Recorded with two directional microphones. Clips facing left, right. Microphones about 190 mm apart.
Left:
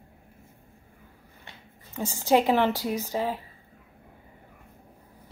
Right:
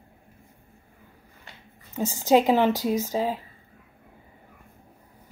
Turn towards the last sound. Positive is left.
turn(degrees=-15)  # may be behind; listen again after turning